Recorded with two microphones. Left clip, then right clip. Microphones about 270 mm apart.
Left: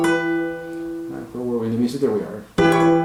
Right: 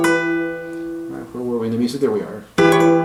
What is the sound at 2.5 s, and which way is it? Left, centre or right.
Music, centre.